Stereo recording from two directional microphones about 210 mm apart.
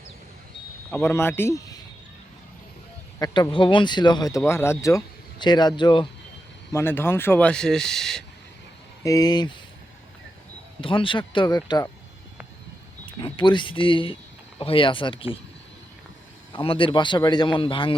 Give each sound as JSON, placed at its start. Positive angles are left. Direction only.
{"t": 0.9, "sound": "speech", "side_deg": 5}
{"t": 3.2, "sound": "speech", "side_deg": 15}
{"t": 6.7, "sound": "speech", "side_deg": 10}
{"t": 9.0, "sound": "speech", "side_deg": 15}
{"t": 10.8, "sound": "speech", "side_deg": 25}
{"t": 13.1, "sound": "speech", "side_deg": 25}
{"t": 16.5, "sound": "speech", "side_deg": 25}